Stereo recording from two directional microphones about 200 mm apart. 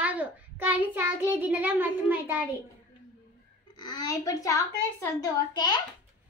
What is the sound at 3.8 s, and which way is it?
A woman's voice, 20° left (ahead or behind).